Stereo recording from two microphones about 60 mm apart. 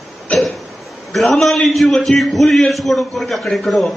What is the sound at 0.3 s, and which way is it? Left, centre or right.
Cough, left.